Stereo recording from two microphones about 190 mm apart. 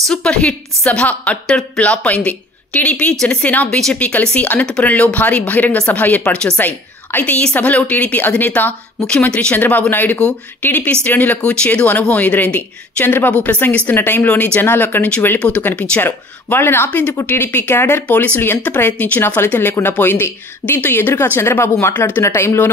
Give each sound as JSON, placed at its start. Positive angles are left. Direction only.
{"t": 0.1, "sound": "a woman's voice", "side_deg": 5}